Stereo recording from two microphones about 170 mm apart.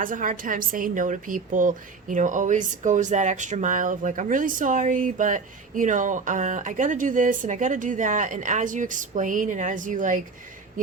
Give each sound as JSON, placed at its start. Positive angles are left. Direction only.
{"t": 0.0, "sound": "speech", "side_deg": -50}